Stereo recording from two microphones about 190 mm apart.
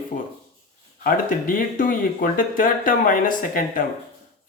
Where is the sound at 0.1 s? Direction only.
45° left (ahead or behind).